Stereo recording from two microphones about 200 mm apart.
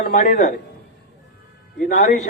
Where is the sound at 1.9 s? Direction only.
40° left (ahead or behind).